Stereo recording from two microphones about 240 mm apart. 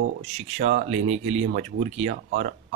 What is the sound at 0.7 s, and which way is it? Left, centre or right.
Speech, right.